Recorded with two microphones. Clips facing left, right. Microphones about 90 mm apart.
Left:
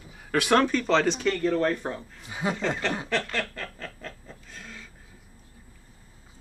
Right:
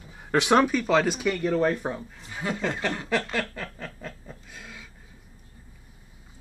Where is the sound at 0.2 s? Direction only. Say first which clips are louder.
Right 2 dB; 20° right (ahead or behind).